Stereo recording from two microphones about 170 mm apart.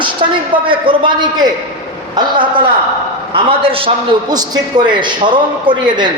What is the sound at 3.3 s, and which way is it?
Speech, 30° right (ahead or behind).